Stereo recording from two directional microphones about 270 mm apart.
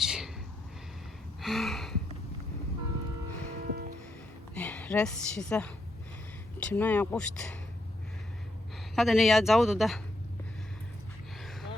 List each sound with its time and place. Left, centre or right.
0.0 s a sound: centre
1.4 s gasp: centre
3.7 s music: right
4.5 s a woman's voice: centre
9.0 s speech: centre